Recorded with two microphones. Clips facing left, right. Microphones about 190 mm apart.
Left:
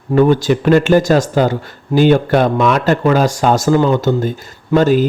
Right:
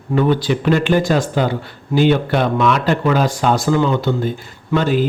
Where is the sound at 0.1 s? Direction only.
45° left (ahead or behind).